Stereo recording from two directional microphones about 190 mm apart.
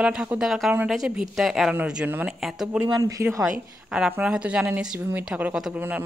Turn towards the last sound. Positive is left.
turn(degrees=-10)  # may be behind; listen again after turning